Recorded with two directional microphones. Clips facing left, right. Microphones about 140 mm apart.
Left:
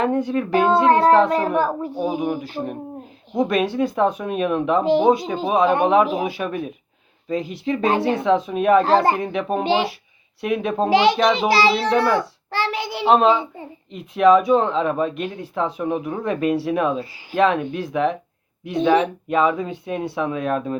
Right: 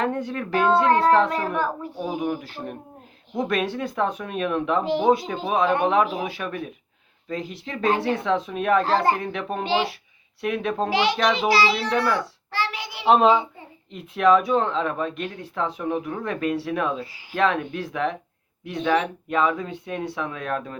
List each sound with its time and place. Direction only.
0.0 s speech: 5° left (ahead or behind)
0.9 s a child's voice: 25° left (ahead or behind)
2.4 s speech: centre (ahead or behind)
4.8 s speech: 20° left (ahead or behind)
7.9 s a child's voice: 25° left (ahead or behind)
8.2 s speech: 5° left (ahead or behind)
8.8 s a child's voice: 20° left (ahead or behind)
9.1 s speech: 10° left (ahead or behind)
10.4 s speech: 5° left (ahead or behind)
10.8 s a child's voice: 25° left (ahead or behind)
13.1 s speech: 5° right (ahead or behind)
18.8 s a child's voice: 25° left (ahead or behind)
19.3 s speech: 5° left (ahead or behind)